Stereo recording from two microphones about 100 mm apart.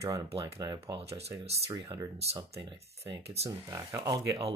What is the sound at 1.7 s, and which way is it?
Speech, 35° right (ahead or behind).